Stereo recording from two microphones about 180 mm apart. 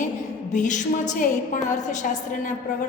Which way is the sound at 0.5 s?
45° left (ahead or behind).